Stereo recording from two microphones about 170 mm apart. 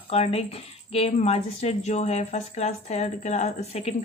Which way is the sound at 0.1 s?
35° left (ahead or behind).